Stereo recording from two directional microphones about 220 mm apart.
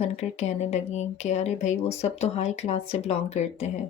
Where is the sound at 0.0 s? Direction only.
30° left (ahead or behind).